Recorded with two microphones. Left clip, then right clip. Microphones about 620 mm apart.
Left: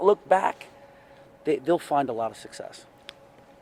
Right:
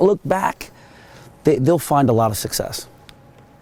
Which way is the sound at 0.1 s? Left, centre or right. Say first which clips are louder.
Right 2 dB; right.